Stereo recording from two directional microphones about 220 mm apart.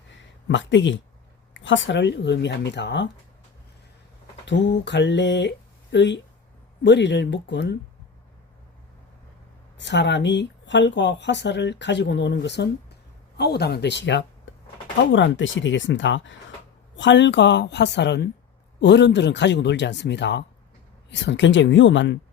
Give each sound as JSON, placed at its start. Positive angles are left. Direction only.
{"t": 0.4, "sound": "speech", "side_deg": 55}
{"t": 4.4, "sound": "speech", "side_deg": 55}
{"t": 9.7, "sound": "speech", "side_deg": 55}